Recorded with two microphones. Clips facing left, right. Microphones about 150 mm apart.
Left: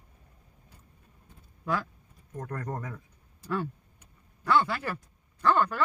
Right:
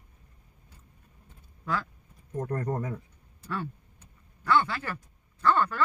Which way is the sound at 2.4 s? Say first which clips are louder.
Right 5 dB; 25° right (ahead or behind).